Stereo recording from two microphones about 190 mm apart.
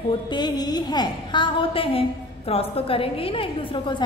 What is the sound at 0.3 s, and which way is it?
A woman's voice, 20° left (ahead or behind).